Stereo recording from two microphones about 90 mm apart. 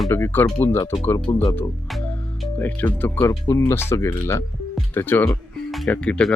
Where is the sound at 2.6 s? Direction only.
20° left (ahead or behind).